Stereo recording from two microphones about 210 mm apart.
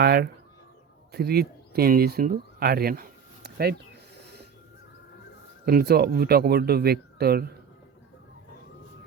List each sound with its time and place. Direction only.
0.0 s speech: 50° right (ahead or behind)
5.6 s speech: 45° right (ahead or behind)